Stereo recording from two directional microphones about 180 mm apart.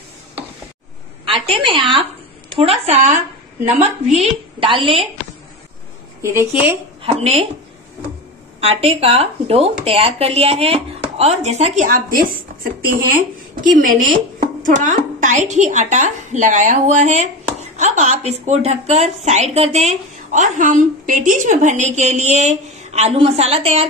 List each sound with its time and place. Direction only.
1.2 s a woman's voice: 30° right (ahead or behind)
2.9 s a woman's voice: 40° right (ahead or behind)
6.2 s a woman's voice: 10° right (ahead or behind)
7.0 s a woman's voice: 35° right (ahead or behind)
8.5 s a woman's voice: 35° right (ahead or behind); by 12.4 s 50° right (ahead or behind)
13.7 s a woman's voice: 50° right (ahead or behind)